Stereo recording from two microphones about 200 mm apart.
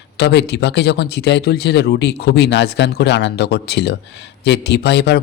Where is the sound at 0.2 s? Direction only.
55° left (ahead or behind).